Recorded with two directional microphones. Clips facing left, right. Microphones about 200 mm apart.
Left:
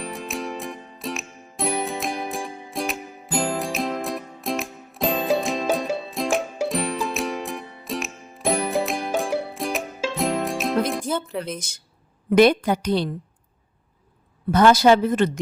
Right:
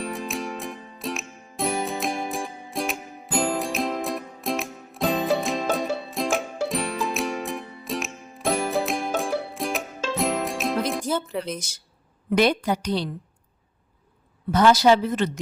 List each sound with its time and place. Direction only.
0.0 s music: centre (ahead or behind)
12.3 s speech: 55° left (ahead or behind)
14.5 s speech: 55° left (ahead or behind)